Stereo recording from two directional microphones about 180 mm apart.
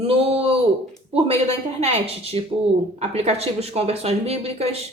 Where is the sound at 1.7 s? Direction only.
35° right (ahead or behind).